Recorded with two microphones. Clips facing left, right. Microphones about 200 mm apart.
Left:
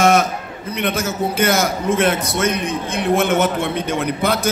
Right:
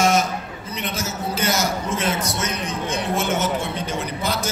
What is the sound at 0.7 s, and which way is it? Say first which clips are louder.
A man's voice: left 8 dB; 60° left (ahead or behind).